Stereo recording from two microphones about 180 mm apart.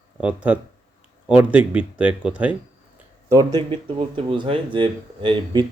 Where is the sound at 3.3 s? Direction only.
20° right (ahead or behind).